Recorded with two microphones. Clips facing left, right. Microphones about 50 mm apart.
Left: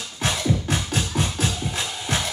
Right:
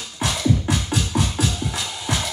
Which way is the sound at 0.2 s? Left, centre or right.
Left.